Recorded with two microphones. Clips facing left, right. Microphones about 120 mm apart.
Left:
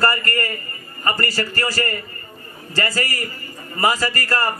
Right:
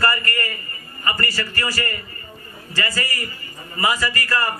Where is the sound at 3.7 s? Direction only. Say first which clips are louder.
Left 2 dB; 35° left (ahead or behind).